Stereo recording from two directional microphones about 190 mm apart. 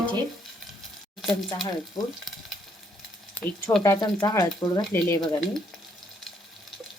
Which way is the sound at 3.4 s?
10° left (ahead or behind).